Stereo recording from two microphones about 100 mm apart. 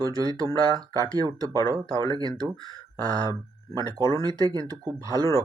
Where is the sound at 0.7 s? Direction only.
40° right (ahead or behind).